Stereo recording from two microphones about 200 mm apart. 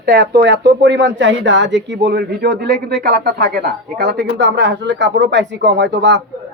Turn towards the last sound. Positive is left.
turn(degrees=-60)  # may be behind; listen again after turning